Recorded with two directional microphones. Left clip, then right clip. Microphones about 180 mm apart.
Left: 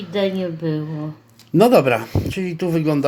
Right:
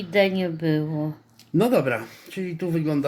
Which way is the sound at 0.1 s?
35° right (ahead or behind).